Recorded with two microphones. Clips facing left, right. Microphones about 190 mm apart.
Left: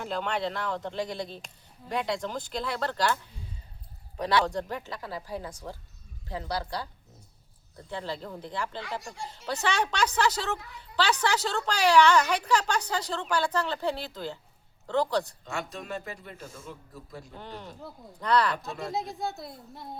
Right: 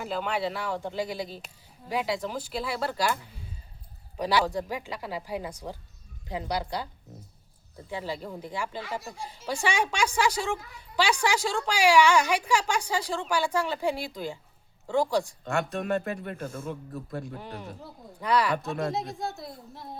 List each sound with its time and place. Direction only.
0.0 s speech: 5° right (ahead or behind)
4.2 s speech: 10° right (ahead or behind)
15.4 s a man's voice: 55° right (ahead or behind)
17.3 s speech: 10° right (ahead or behind)
18.5 s a man's voice: 60° right (ahead or behind)
18.9 s a woman's voice: centre (ahead or behind)